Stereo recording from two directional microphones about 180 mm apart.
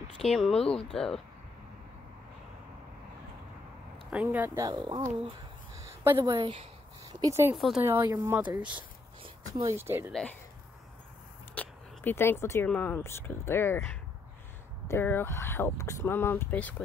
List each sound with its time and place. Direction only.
0.2 s speech: centre (ahead or behind)
4.1 s speech: 10° right (ahead or behind)
4.6 s speech: 25° right (ahead or behind)
7.1 s speech: 20° right (ahead or behind)
7.5 s speech: centre (ahead or behind)
7.8 s speech: 15° right (ahead or behind)
11.5 s speech: 10° left (ahead or behind)